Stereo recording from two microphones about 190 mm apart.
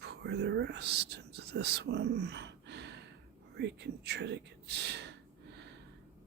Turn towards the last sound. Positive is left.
turn(degrees=-60)  # may be behind; listen again after turning